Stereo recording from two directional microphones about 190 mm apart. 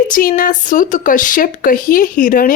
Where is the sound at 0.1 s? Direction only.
45° left (ahead or behind).